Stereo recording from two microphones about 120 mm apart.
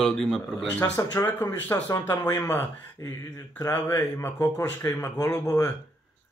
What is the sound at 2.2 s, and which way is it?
Speech, 30° left (ahead or behind).